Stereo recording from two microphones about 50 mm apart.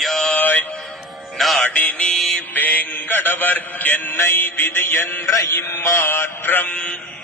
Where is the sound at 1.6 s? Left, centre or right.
Left.